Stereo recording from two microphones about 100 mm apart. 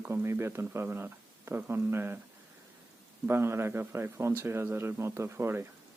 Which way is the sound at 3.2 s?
25° right (ahead or behind).